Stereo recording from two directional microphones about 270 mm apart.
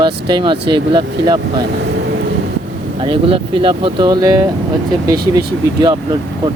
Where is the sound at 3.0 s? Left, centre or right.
Centre.